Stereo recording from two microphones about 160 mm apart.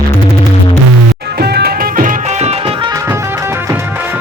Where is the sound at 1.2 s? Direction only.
85° right.